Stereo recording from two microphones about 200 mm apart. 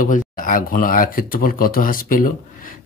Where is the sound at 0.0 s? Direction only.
45° left (ahead or behind).